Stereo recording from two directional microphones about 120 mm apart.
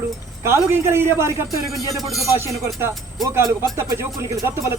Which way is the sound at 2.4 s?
25° right (ahead or behind).